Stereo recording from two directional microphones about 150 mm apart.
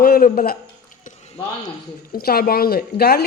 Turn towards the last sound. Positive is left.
turn(degrees=90)